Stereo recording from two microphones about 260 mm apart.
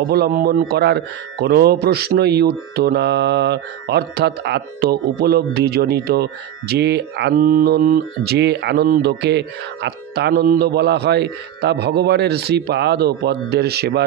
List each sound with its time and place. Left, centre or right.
0.1 s speech: right